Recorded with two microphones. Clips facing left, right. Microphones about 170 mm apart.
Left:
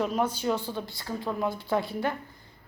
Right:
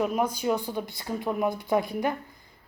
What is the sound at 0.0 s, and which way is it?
A woman's voice, 10° right (ahead or behind).